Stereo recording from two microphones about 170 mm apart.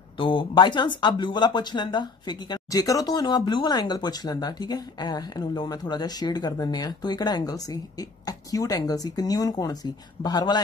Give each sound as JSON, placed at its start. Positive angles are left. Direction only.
{"t": 0.2, "sound": "speech", "side_deg": 30}